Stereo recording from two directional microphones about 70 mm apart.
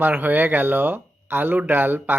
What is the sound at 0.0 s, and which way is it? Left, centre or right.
Speech, right.